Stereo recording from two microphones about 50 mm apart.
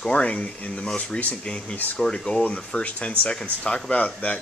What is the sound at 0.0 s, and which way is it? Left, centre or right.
Speech, left.